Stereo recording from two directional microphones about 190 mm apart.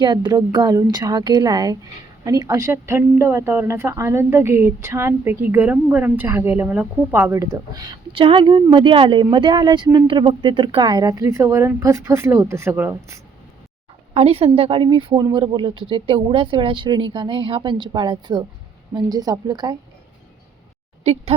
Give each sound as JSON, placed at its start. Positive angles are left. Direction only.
{"t": 0.0, "sound": "a woman's voice", "side_deg": -20}
{"t": 14.1, "sound": "speech", "side_deg": -30}
{"t": 21.0, "sound": "speech", "side_deg": -35}